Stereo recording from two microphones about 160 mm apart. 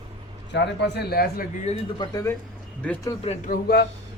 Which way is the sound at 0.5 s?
90° left.